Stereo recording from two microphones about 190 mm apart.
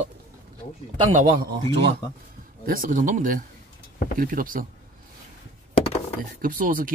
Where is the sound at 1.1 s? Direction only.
40° right (ahead or behind).